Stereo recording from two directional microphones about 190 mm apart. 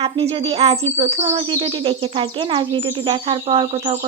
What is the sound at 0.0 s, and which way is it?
Speech, 30° right (ahead or behind).